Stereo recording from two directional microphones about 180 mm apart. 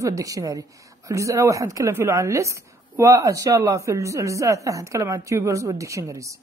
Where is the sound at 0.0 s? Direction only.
20° right (ahead or behind).